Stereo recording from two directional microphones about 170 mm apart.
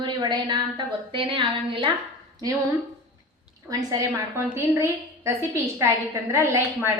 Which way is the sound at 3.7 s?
20° right (ahead or behind).